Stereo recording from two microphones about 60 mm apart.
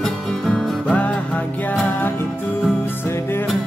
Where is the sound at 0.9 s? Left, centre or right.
Left.